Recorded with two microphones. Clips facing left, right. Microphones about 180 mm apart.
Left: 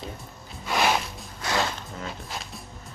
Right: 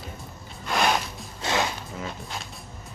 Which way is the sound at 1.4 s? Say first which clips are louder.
Right 1 dB; 25° right (ahead or behind).